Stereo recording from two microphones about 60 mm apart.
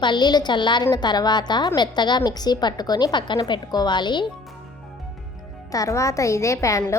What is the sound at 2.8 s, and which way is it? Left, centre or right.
A woman's voice, left.